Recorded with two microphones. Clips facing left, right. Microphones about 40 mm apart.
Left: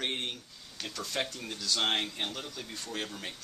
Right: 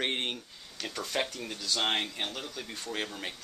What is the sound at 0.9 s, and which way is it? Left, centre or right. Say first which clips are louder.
Speech: right 2 dB; right.